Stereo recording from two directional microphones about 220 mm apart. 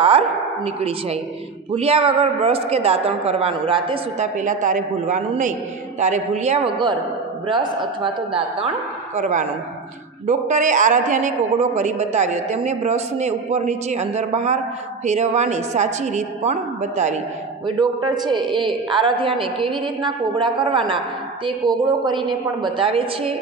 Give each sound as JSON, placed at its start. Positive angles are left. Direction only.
{"t": 0.7, "sound": "a man's voice", "side_deg": -30}
{"t": 9.1, "sound": "a woman's voice", "side_deg": -35}
{"t": 17.6, "sound": "a man's voice", "side_deg": -20}